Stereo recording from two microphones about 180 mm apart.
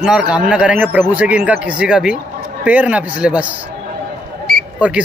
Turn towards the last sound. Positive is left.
turn(degrees=-5)  # may be behind; listen again after turning